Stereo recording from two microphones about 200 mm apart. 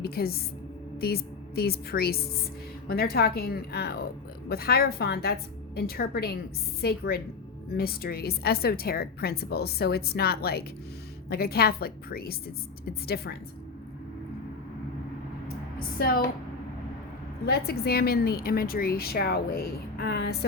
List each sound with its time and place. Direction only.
0.0 s a woman's voice: 50° left (ahead or behind)
16.0 s a woman's voice: 50° left (ahead or behind)
17.4 s a woman's voice: 50° left (ahead or behind)